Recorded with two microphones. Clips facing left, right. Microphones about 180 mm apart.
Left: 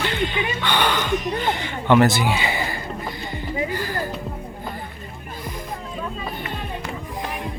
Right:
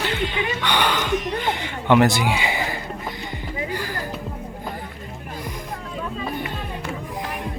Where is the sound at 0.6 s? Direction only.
10° right (ahead or behind).